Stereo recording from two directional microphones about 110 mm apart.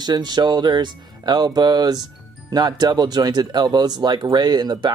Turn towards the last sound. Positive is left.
turn(degrees=-40)  # may be behind; listen again after turning